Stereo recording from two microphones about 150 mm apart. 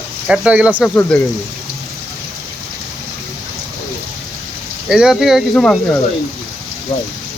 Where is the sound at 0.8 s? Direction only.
5° left (ahead or behind).